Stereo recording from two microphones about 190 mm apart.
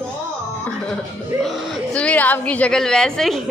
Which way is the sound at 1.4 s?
5° left (ahead or behind).